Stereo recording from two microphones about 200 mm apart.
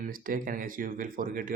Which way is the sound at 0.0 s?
45° right (ahead or behind).